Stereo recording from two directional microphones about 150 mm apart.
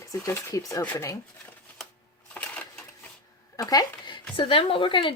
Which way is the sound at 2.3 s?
10° left (ahead or behind).